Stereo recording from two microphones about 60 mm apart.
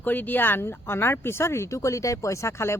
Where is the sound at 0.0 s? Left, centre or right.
Left.